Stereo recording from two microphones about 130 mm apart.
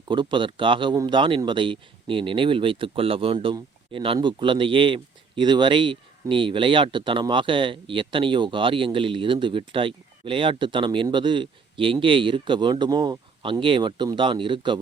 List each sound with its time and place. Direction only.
0.1 s speech: 40° right (ahead or behind)